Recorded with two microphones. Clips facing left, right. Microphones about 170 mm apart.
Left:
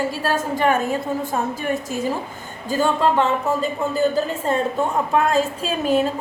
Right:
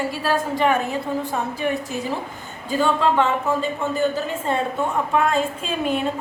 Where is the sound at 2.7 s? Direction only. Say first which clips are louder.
Left 1 dB; 40° left (ahead or behind).